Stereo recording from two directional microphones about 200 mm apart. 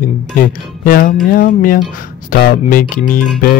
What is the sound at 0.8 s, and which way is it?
Speech, 45° left (ahead or behind).